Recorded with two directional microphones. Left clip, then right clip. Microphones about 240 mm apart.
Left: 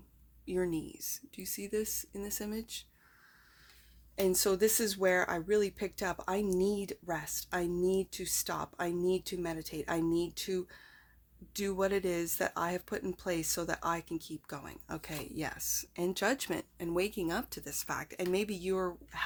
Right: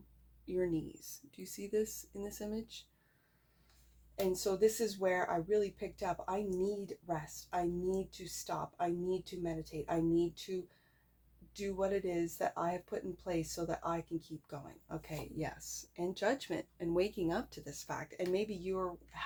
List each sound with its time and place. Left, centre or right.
0.4 s speech: left
4.1 s speech: left